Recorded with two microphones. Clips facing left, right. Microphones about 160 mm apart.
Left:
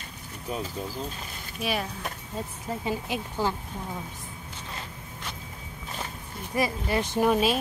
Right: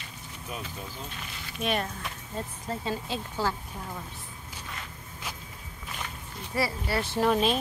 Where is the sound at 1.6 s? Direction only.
5° left (ahead or behind).